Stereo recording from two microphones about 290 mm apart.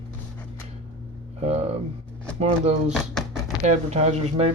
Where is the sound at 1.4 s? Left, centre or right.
Right.